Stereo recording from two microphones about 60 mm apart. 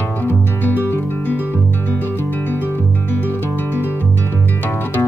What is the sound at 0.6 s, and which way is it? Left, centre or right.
Music, left.